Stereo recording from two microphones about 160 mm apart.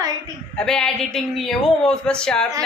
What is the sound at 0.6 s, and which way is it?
Speech, 5° left (ahead or behind).